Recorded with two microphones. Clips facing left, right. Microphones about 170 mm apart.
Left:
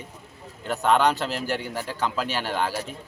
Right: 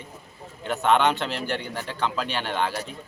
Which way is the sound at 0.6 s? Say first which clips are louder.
Even; centre (ahead or behind).